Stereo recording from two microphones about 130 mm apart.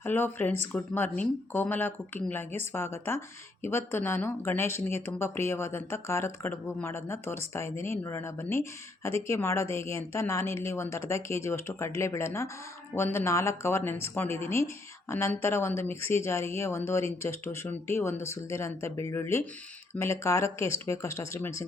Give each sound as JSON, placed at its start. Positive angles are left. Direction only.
{"t": 0.0, "sound": "speech", "side_deg": 15}